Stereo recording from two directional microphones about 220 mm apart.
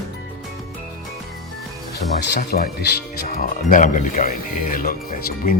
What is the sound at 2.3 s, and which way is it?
Speech, 45° left (ahead or behind).